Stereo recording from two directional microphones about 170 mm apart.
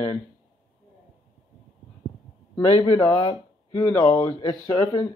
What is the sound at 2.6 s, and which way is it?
Speech, 35° left (ahead or behind).